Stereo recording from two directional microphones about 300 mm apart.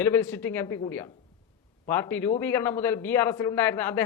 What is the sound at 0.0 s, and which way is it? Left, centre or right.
A man's voice, centre.